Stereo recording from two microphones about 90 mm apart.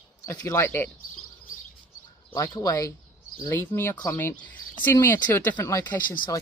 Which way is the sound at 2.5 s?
40° left (ahead or behind).